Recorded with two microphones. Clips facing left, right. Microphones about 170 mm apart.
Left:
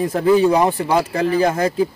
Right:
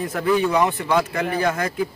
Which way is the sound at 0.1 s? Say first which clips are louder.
Left 5 dB; 30° left (ahead or behind).